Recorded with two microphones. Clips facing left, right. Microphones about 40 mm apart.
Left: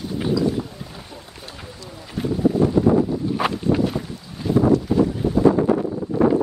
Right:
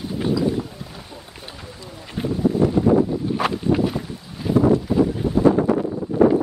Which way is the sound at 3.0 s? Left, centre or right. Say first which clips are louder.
Even; centre.